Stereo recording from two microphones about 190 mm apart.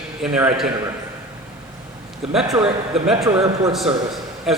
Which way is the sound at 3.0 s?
Centre (ahead or behind).